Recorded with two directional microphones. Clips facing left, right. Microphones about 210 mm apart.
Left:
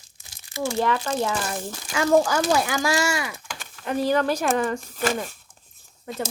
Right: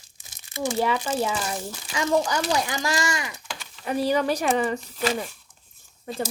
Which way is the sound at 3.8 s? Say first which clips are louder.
Left 1 dB; 10° right (ahead or behind).